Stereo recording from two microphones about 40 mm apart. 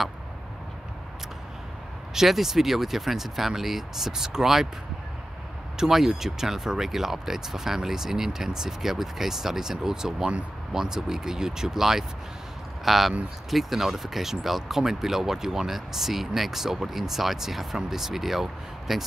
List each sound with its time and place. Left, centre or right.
2.1 s speech: centre
5.8 s speech: centre